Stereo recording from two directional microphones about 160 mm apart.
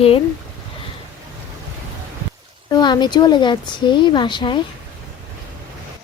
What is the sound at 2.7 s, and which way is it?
Speech, 25° left (ahead or behind).